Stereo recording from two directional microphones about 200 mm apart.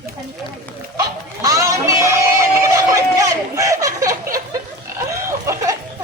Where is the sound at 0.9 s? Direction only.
15° right (ahead or behind).